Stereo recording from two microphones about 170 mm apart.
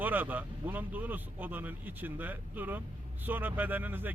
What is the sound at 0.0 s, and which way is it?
Speech, 10° right (ahead or behind).